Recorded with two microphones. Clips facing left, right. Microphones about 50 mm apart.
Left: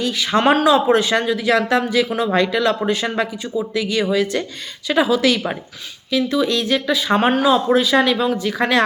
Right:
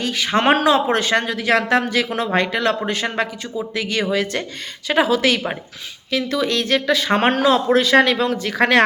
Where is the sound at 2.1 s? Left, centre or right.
Right.